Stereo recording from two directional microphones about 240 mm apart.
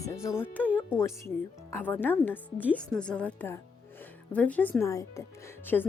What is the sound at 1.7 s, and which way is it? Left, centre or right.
Speech, centre.